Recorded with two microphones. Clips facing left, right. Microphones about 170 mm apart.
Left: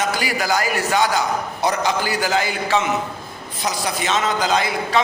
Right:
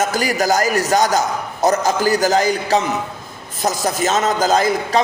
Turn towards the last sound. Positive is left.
turn(degrees=-45)  # may be behind; listen again after turning